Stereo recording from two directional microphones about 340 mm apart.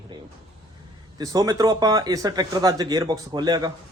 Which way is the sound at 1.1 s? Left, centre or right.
Centre.